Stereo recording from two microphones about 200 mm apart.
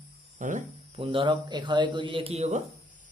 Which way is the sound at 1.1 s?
25° right (ahead or behind).